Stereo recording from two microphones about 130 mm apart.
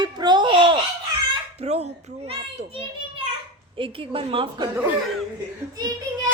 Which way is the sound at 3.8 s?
45° right (ahead or behind).